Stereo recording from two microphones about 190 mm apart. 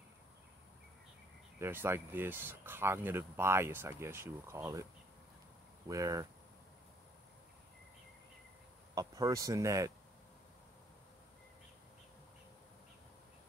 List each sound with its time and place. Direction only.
1.6 s speech: 10° right (ahead or behind)
5.9 s speech: 15° right (ahead or behind)
8.9 s speech: 20° right (ahead or behind)